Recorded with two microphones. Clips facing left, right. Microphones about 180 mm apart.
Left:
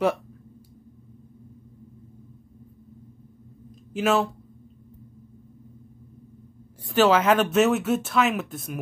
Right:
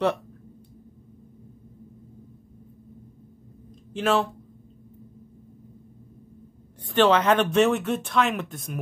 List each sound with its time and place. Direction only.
3.9 s speech: 5° left (ahead or behind)
6.8 s speech: 5° left (ahead or behind)